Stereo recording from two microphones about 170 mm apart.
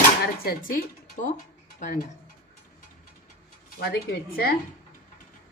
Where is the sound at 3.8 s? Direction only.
75° left (ahead or behind).